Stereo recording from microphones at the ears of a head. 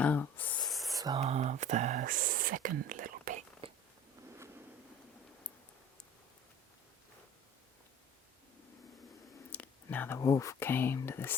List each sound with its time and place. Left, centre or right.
0.0 s a sound: left
1.0 s speech: right
9.4 s speech: left